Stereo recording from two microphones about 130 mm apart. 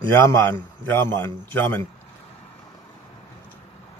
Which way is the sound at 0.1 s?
20° left (ahead or behind).